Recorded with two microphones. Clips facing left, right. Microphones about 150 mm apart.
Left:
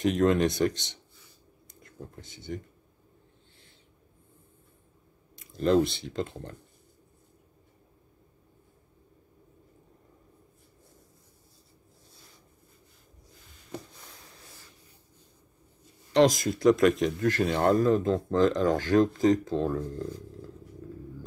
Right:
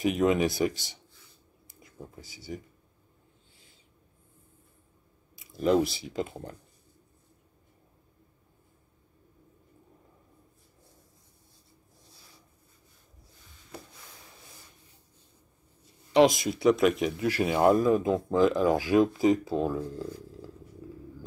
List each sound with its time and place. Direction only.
0.0 s speech: 5° right (ahead or behind)
5.4 s speech: 5° right (ahead or behind)
16.1 s speech: 5° right (ahead or behind)